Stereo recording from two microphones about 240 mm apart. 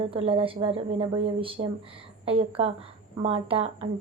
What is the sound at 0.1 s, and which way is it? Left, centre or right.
A woman's voice, right.